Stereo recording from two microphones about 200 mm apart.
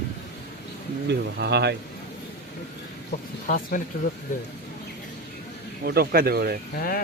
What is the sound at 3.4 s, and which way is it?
Speech, 45° left (ahead or behind).